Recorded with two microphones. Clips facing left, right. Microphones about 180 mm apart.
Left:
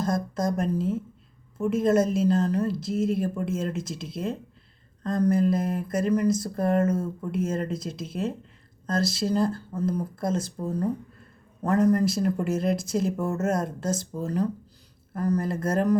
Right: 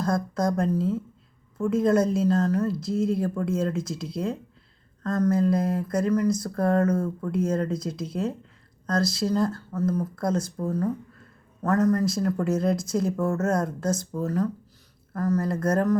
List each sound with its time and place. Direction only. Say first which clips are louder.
0.0 s speech: right 1 dB; 25° left (ahead or behind)
10.7 s a man's voice: left 1 dB; 15° left (ahead or behind)
12.0 s speech: even; 25° left (ahead or behind)